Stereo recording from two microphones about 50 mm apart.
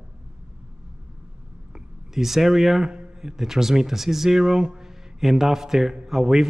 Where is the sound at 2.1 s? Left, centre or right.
Centre.